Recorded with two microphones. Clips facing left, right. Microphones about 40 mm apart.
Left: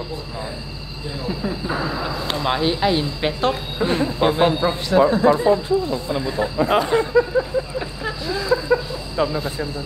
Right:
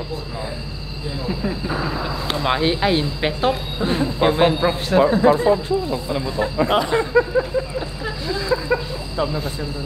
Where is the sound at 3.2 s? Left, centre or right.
Centre.